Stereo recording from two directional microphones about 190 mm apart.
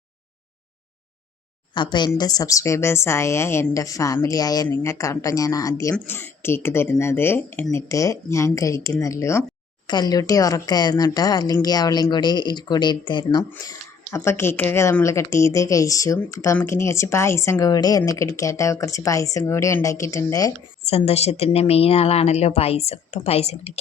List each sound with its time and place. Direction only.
1.7 s a woman's voice: 25° left (ahead or behind)
14.1 s a woman's voice: 15° left (ahead or behind)
20.9 s a woman's voice: 35° left (ahead or behind)